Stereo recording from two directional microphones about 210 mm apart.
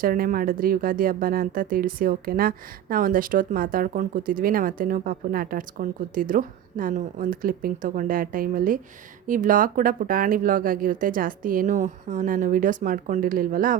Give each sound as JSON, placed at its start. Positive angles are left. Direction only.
{"t": 0.0, "sound": "speech", "side_deg": -40}